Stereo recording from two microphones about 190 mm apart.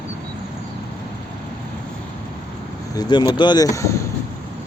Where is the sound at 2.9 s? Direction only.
20° left (ahead or behind).